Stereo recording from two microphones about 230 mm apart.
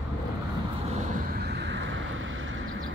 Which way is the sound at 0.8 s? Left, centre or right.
Right.